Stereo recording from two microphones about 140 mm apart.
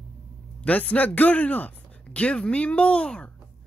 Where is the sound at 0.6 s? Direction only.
10° left (ahead or behind).